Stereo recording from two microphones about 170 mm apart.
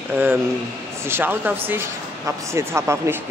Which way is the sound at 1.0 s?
10° right (ahead or behind).